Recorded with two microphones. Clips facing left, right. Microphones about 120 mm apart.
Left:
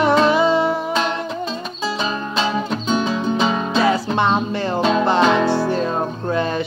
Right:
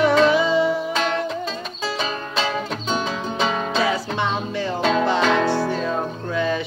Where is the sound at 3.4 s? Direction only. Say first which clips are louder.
Right 1 dB; 5° left (ahead or behind).